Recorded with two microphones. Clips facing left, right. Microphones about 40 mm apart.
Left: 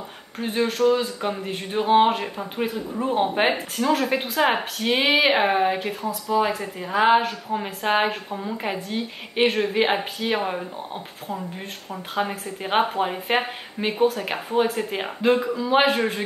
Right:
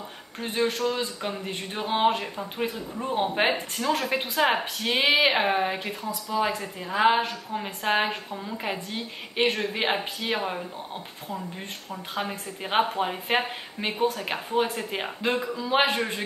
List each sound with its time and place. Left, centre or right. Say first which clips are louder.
0.4 s speech: left 4 dB; centre
6.0 s speech: left 6 dB; left
6.6 s speech: left 2 dB; centre
11.9 s speech: left 5 dB; centre